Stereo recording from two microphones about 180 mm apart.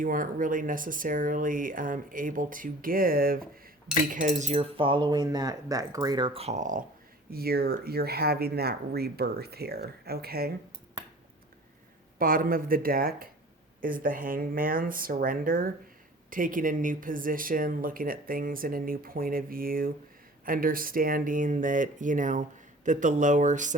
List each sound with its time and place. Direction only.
0.0 s speech: 50° right (ahead or behind)
7.3 s speech: 55° right (ahead or behind)
12.2 s speech: 50° right (ahead or behind)